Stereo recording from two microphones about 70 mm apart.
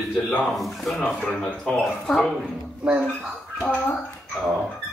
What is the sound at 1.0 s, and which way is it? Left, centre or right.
Speech, centre.